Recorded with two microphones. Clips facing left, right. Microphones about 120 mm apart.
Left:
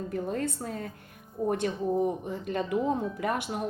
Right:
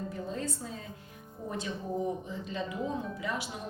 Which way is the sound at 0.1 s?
60° left (ahead or behind).